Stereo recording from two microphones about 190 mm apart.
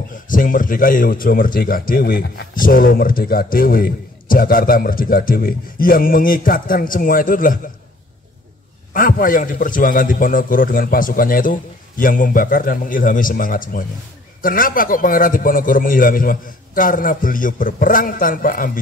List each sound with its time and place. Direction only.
0.3 s speech: 45° left (ahead or behind)
8.9 s speech: 45° left (ahead or behind)